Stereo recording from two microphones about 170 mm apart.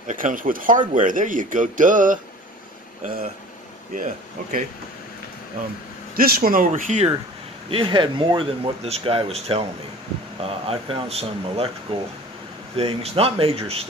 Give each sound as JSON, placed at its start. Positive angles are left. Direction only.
{"t": 0.1, "sound": "speech", "side_deg": -50}
{"t": 3.9, "sound": "speech", "side_deg": -50}
{"t": 6.1, "sound": "speech", "side_deg": -60}
{"t": 7.7, "sound": "speech", "side_deg": -30}
{"t": 10.7, "sound": "speech", "side_deg": -35}